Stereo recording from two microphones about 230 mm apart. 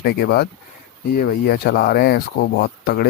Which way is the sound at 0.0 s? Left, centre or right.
Left.